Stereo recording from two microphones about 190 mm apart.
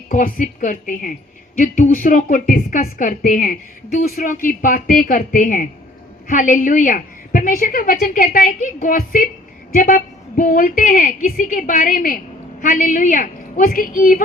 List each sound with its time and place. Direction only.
0.1 s a woman's voice: 45° left (ahead or behind)